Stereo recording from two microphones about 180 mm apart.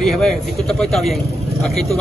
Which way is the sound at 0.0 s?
Centre (ahead or behind).